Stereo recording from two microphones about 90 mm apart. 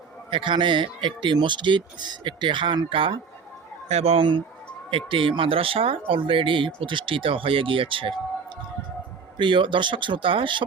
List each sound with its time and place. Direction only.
0.3 s speech: 65° right (ahead or behind)